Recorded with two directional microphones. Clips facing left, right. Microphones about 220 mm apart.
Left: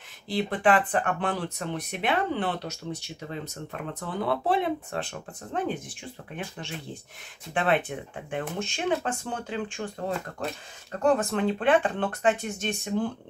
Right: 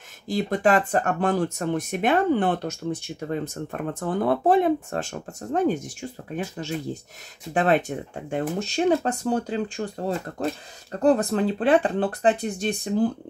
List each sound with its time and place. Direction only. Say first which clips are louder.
0.3 s speech: right 3 dB; 45° right (ahead or behind)